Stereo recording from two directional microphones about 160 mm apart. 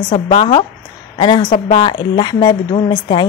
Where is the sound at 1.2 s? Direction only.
30° left (ahead or behind).